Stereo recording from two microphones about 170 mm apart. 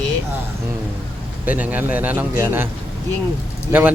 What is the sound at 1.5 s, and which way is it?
A man's voice, 10° right (ahead or behind).